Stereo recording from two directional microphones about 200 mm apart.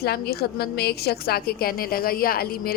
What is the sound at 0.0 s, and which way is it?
A woman's voice, 50° left (ahead or behind).